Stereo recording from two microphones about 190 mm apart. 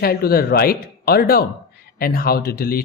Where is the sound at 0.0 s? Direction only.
55° left (ahead or behind).